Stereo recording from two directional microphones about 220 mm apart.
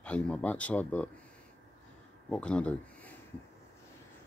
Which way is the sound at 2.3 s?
5° left (ahead or behind).